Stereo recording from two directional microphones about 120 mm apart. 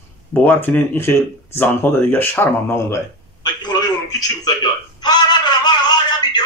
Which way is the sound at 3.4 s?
35° left (ahead or behind).